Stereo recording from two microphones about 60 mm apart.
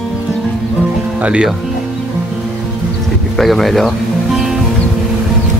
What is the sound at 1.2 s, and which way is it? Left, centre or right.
Speech, centre.